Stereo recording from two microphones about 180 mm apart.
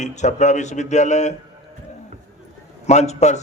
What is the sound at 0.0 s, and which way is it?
Speech, 40° left (ahead or behind).